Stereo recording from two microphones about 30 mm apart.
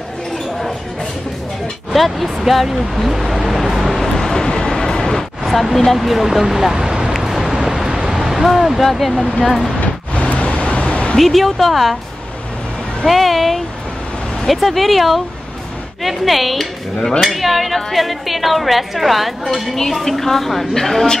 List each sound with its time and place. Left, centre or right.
1.9 s speech: centre
4.2 s vehicle: centre
5.9 s speech: centre
6.7 s a sound: right
7.2 s a sound: centre
8.5 s a woman's voice: centre
9.8 s a sound: left
11.1 s a woman's voice: centre
13.0 s a woman's voice: centre
19.7 s a woman's voice: centre